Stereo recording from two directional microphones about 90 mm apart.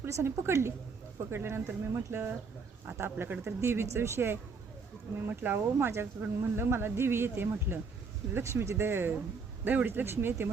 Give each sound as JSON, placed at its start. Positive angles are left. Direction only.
{"t": 0.0, "sound": "speech", "side_deg": -30}